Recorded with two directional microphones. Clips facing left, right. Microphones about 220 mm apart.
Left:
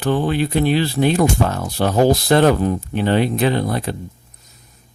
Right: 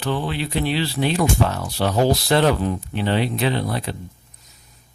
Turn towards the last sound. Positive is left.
turn(degrees=50)  # may be behind; listen again after turning